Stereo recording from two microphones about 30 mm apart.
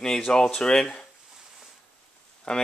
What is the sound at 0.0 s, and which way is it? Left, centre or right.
Speech, centre.